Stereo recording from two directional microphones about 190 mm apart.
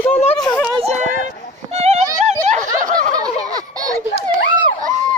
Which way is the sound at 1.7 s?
35° right (ahead or behind).